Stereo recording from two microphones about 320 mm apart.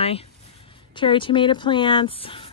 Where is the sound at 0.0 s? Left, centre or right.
Centre.